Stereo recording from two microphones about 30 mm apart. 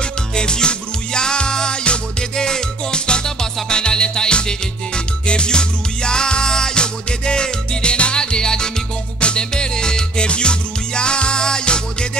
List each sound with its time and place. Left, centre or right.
0.4 s music: left